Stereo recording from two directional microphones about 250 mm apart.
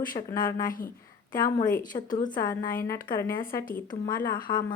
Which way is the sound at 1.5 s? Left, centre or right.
Left.